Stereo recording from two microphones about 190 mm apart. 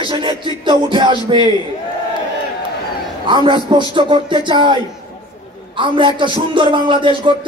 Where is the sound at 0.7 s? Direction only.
25° right (ahead or behind).